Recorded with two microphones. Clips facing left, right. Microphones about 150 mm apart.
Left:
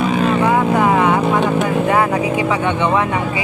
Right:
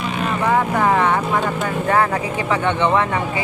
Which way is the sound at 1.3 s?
15° left (ahead or behind).